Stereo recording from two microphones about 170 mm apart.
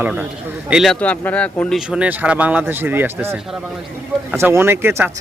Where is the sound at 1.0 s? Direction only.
10° left (ahead or behind).